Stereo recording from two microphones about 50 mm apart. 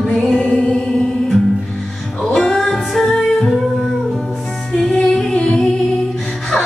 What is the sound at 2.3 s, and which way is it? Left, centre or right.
Music, centre.